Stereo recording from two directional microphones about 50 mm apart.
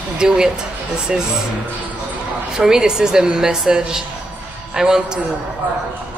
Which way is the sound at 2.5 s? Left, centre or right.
Centre.